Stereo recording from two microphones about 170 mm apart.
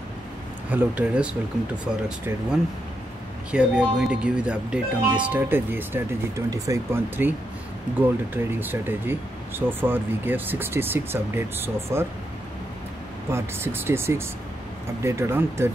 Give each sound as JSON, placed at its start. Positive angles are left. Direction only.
{"t": 0.7, "sound": "speech", "side_deg": -5}
{"t": 3.5, "sound": "speech", "side_deg": -5}
{"t": 13.3, "sound": "speech", "side_deg": -15}